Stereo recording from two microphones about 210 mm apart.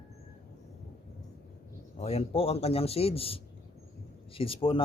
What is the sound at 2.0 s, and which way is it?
Speech, 30° left (ahead or behind).